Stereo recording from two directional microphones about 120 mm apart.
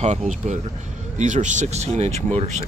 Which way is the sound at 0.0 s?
75° right (ahead or behind).